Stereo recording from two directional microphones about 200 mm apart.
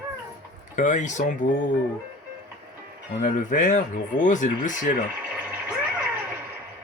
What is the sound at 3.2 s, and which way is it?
Speech, 40° left (ahead or behind).